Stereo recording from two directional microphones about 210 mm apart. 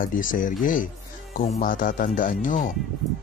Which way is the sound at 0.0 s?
40° left (ahead or behind).